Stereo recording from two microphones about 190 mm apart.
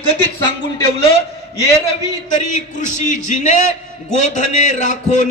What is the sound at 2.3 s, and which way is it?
A man's voice, 40° left (ahead or behind).